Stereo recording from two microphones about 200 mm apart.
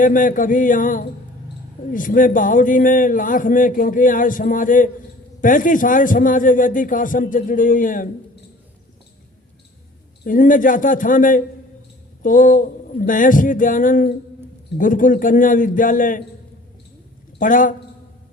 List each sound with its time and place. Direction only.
0.0 s a man's voice: 40° left (ahead or behind)
10.2 s a man's voice: 40° left (ahead or behind)
17.4 s a man's voice: 40° left (ahead or behind)